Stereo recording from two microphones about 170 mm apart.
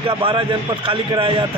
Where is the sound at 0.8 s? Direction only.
30° right (ahead or behind).